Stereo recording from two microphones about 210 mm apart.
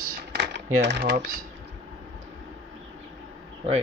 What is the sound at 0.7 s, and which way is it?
Speech, 55° right (ahead or behind).